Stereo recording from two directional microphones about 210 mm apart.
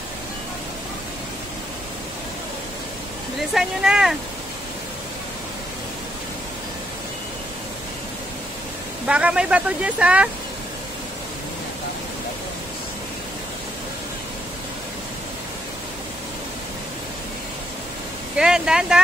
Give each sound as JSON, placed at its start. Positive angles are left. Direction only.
{"t": 3.3, "sound": "speech", "side_deg": 0}
{"t": 9.0, "sound": "speech", "side_deg": -5}
{"t": 18.3, "sound": "speech", "side_deg": -5}